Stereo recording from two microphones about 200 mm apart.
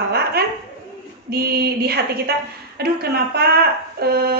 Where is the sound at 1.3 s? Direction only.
50° right (ahead or behind).